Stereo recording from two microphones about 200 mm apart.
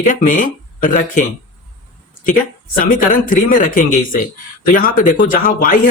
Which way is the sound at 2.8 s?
40° left (ahead or behind).